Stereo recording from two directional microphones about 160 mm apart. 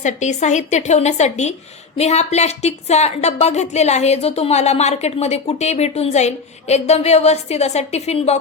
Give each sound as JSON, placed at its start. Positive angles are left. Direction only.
{"t": 0.0, "sound": "a woman's voice", "side_deg": 45}